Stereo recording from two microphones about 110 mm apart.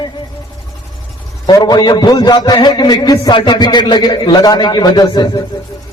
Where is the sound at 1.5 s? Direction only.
35° left (ahead or behind).